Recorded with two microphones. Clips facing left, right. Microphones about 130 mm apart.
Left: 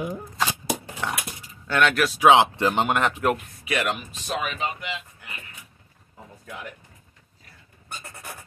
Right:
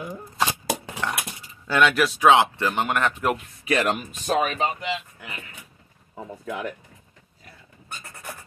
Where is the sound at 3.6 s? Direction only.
40° right (ahead or behind).